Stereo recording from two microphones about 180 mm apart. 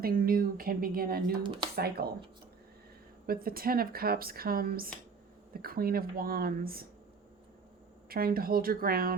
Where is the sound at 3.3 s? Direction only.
55° right (ahead or behind).